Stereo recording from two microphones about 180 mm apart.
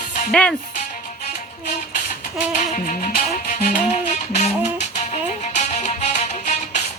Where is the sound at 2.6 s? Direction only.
45° left (ahead or behind).